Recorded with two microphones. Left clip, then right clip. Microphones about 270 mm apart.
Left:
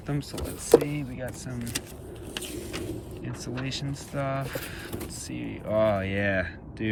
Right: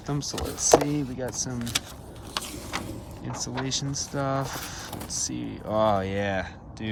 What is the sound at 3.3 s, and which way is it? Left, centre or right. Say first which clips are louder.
Speech: right 5 dB; centre.